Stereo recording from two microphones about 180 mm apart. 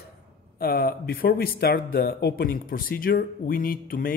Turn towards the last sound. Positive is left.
turn(degrees=50)  # may be behind; listen again after turning